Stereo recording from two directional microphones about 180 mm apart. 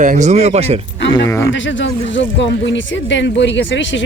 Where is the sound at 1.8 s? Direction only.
90° left.